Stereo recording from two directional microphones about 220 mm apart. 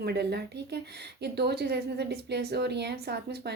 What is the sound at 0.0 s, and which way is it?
A woman's voice, 50° right (ahead or behind).